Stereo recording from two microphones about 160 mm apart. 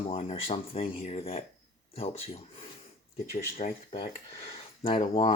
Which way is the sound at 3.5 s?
45° left (ahead or behind).